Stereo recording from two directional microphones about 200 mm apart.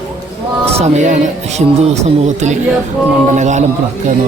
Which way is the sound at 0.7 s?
35° right (ahead or behind).